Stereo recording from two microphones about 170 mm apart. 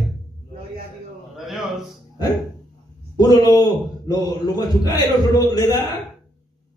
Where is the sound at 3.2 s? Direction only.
25° left (ahead or behind).